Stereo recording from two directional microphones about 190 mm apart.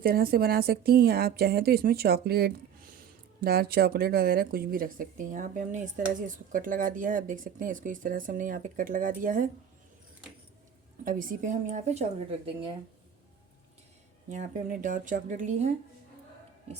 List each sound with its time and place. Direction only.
0.0 s a woman's voice: 50° right (ahead or behind)
11.0 s a woman's voice: 45° right (ahead or behind)
14.3 s a woman's voice: 40° right (ahead or behind)